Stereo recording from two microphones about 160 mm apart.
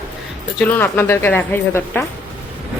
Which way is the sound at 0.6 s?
15° left (ahead or behind).